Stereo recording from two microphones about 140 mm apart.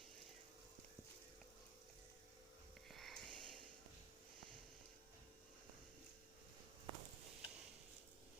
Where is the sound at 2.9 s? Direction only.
Centre (ahead or behind).